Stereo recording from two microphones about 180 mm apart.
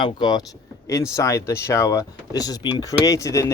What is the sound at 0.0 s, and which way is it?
Speech, 25° left (ahead or behind).